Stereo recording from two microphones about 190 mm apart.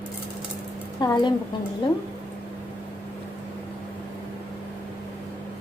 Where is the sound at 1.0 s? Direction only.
20° left (ahead or behind).